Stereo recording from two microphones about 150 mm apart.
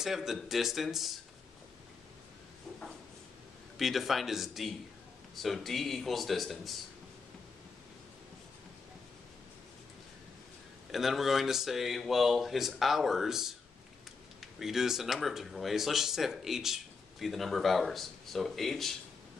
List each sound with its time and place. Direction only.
0.0 s speech: centre (ahead or behind)
3.7 s speech: centre (ahead or behind)
10.9 s speech: centre (ahead or behind)